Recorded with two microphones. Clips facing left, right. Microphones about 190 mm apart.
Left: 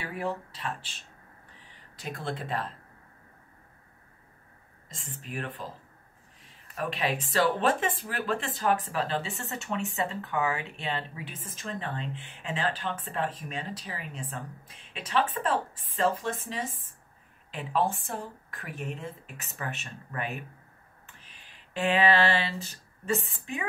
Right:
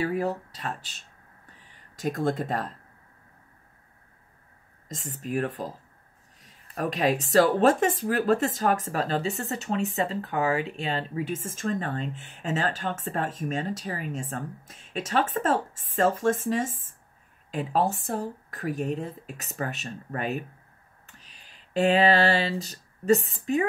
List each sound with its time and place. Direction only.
0.0 s speech: 40° right (ahead or behind)
2.0 s speech: 45° right (ahead or behind)
4.8 s speech: 45° right (ahead or behind)
6.4 s a sound: 40° right (ahead or behind)
7.2 s speech: 40° right (ahead or behind)
21.2 s a sound: 40° right (ahead or behind)